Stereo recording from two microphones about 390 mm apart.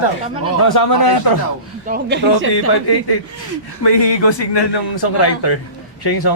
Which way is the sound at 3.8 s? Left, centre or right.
Left.